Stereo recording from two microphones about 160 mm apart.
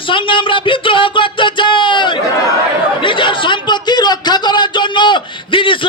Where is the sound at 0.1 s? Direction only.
30° left (ahead or behind).